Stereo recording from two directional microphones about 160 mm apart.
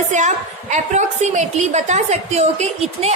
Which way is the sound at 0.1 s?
50° right (ahead or behind).